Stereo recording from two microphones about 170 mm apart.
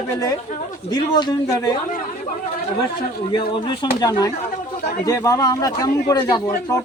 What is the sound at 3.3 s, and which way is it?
A man's voice, 25° left (ahead or behind).